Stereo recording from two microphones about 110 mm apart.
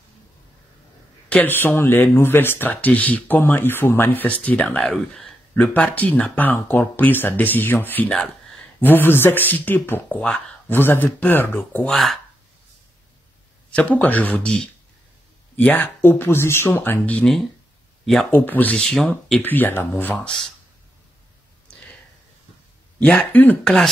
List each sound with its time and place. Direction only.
1.3 s speech: 15° left (ahead or behind)
10.0 s speech: 5° left (ahead or behind)
10.7 s speech: 20° left (ahead or behind)
11.9 s speech: centre (ahead or behind)
13.7 s speech: 10° left (ahead or behind)
18.3 s speech: 15° left (ahead or behind)
18.8 s speech: 5° left (ahead or behind)
19.4 s speech: 15° left (ahead or behind)
22.9 s speech: 10° left (ahead or behind)